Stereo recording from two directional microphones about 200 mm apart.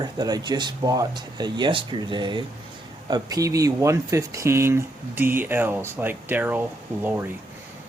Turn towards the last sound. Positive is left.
turn(degrees=-10)  # may be behind; listen again after turning